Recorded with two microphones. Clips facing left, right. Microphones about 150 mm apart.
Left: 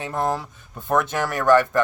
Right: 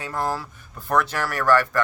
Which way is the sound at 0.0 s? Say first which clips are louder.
Left 2 dB; 20° left (ahead or behind).